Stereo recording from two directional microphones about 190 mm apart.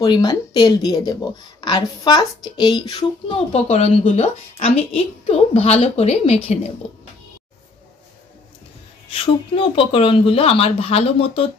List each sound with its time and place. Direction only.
0.0 s speech: 20° left (ahead or behind)
9.1 s speech: 30° left (ahead or behind)